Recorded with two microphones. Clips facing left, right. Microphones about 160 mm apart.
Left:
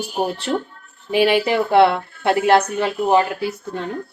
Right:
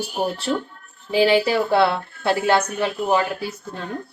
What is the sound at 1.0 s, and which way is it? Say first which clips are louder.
Speech: left 1 dB; 20° left (ahead or behind).